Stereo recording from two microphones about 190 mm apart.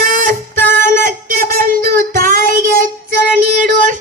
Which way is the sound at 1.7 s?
45° right (ahead or behind).